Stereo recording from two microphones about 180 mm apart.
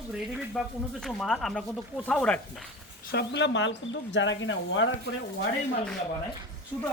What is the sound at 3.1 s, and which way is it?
Speech, 75° left (ahead or behind).